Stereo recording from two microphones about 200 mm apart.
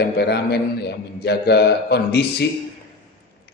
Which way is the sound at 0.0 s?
55° left (ahead or behind).